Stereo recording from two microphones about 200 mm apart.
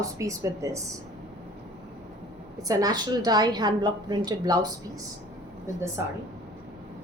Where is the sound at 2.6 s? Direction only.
20° right (ahead or behind).